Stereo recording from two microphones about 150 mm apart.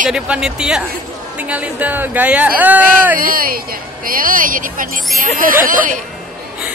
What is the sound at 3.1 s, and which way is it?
A woman's voice, 70° right (ahead or behind).